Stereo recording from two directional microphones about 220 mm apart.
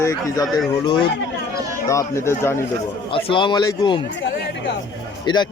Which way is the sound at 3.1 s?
20° left (ahead or behind).